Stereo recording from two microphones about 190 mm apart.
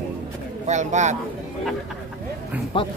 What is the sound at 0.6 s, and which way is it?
Speech, 40° right (ahead or behind).